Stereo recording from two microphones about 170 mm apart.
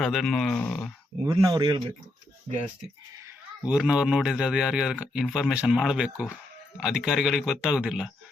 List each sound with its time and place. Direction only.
0.0 s speech: centre (ahead or behind)
1.2 s speech: 25° right (ahead or behind)
3.7 s speech: 5° right (ahead or behind)